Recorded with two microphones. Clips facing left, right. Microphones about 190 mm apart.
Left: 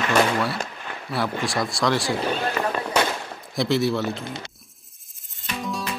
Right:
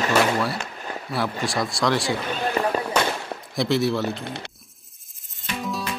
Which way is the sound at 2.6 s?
35° right (ahead or behind).